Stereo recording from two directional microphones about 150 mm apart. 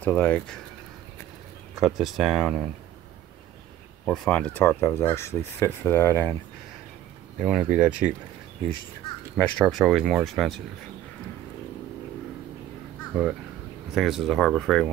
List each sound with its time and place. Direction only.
0.0 s speech: 10° left (ahead or behind)
1.8 s speech: centre (ahead or behind)
4.0 s speech: 5° left (ahead or behind)
7.3 s speech: 5° right (ahead or behind)
9.4 s speech: 5° left (ahead or behind)
13.1 s speech: 5° right (ahead or behind)